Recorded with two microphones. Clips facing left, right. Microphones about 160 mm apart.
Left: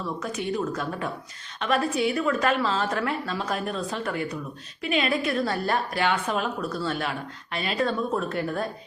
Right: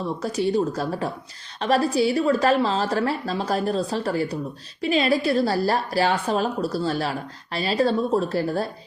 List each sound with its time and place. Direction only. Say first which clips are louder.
0.2 s a woman's voice: right 8 dB; 35° right (ahead or behind)